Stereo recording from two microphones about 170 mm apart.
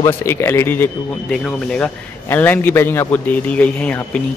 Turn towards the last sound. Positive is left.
turn(degrees=10)  # may be behind; listen again after turning